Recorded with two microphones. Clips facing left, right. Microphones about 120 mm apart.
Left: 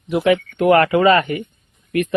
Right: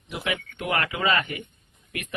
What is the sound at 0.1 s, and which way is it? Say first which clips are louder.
Speech: left 14 dB; 60° left (ahead or behind).